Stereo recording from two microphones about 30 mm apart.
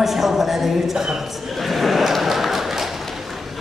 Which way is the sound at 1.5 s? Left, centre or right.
Centre.